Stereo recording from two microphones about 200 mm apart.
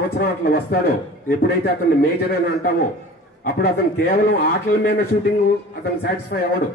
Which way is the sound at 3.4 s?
50° left (ahead or behind).